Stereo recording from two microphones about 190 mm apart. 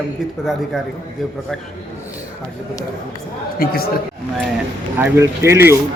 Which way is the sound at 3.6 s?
50° left (ahead or behind).